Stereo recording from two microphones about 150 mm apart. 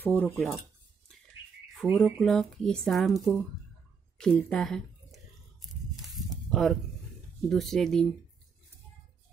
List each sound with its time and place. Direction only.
0.0 s speech: 10° left (ahead or behind)
2.0 s speech: centre (ahead or behind)
6.1 s a sound: centre (ahead or behind)
7.4 s speech: centre (ahead or behind)